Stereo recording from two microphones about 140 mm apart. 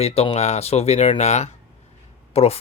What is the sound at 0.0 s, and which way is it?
Speech, 45° left (ahead or behind).